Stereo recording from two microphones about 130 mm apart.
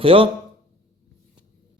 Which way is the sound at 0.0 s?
45° right (ahead or behind).